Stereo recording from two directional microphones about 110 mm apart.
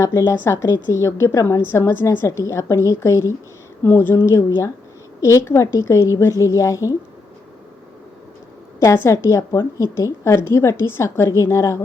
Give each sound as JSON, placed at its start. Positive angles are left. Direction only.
{"t": 0.0, "sound": "a woman's voice", "side_deg": 25}
{"t": 8.8, "sound": "a woman's voice", "side_deg": 25}